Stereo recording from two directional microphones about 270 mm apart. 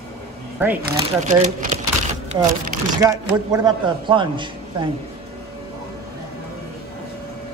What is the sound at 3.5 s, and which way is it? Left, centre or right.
A man's voice, centre.